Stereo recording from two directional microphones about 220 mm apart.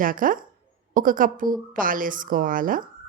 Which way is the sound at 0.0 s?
40° right (ahead or behind).